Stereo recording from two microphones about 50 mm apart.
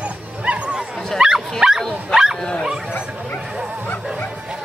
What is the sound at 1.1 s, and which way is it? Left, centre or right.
Dog, centre.